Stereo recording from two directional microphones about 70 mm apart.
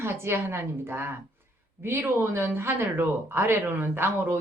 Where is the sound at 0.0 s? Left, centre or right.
Right.